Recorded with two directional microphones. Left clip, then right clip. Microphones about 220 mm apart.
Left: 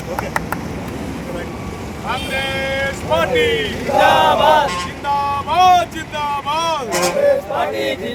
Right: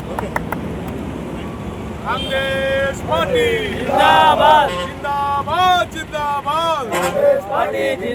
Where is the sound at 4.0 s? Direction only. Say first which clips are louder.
Right 1 dB; 25° right (ahead or behind).